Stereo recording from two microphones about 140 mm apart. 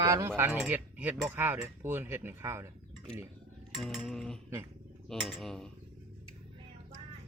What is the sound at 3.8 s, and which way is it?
Speech, centre (ahead or behind).